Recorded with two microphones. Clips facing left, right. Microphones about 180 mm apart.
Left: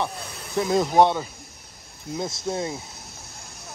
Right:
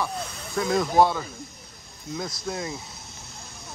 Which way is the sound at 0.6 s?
25° left (ahead or behind).